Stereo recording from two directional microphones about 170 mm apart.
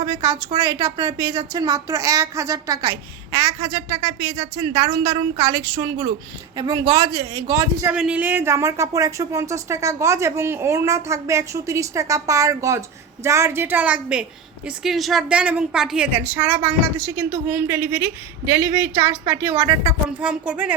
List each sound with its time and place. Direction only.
0.2 s speech: 20° right (ahead or behind)
7.9 s a woman's voice: 5° right (ahead or behind)